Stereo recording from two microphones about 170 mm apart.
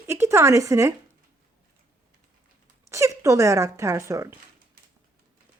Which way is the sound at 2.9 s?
20° right (ahead or behind).